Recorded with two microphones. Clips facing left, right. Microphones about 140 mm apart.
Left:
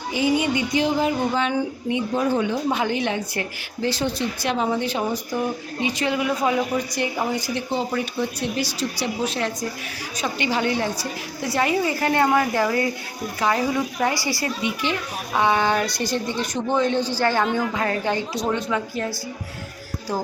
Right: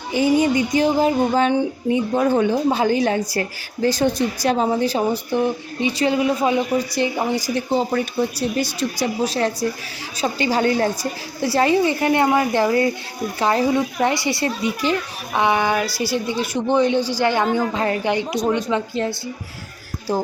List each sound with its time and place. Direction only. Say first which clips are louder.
0.1 s a woman's voice: right 4 dB; 45° right (ahead or behind)
2.1 s speech: right 4 dB; 55° right (ahead or behind)
2.5 s a woman's voice: right 5 dB; 35° right (ahead or behind)
7.5 s a woman's voice: right 4 dB; 40° right (ahead or behind)
8.6 s a woman's voice: right 3 dB; 55° right (ahead or behind)
9.2 s a woman's voice: right 6 dB; 35° right (ahead or behind)
14.6 s a woman's voice: right 4 dB; 40° right (ahead or behind)
15.3 s speech: right 1 dB; 15° right (ahead or behind)
17.4 s a woman's voice: right 3 dB; 40° right (ahead or behind)
17.8 s a woman's voice: right 3 dB; 20° right (ahead or behind)